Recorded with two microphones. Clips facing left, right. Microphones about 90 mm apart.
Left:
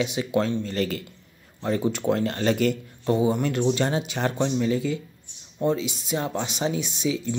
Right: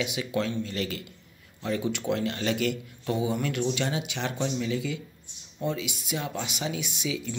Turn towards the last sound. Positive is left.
turn(degrees=35)  # may be behind; listen again after turning